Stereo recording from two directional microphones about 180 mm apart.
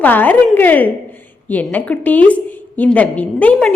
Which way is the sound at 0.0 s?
10° left (ahead or behind).